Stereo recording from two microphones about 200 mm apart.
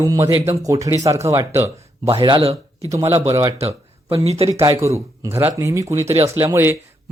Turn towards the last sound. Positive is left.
turn(degrees=-10)  # may be behind; listen again after turning